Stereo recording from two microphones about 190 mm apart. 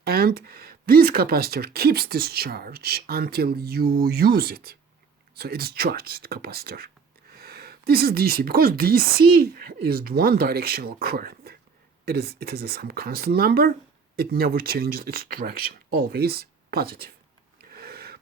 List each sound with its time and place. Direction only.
0.0 s speech: 55° right (ahead or behind)
17.7 s snort: 55° right (ahead or behind)